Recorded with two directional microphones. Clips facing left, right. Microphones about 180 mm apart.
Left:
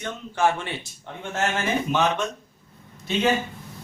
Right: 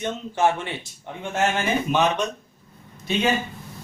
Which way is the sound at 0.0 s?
20° right (ahead or behind).